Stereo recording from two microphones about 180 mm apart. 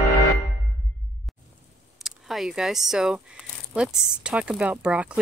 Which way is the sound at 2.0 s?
Centre (ahead or behind).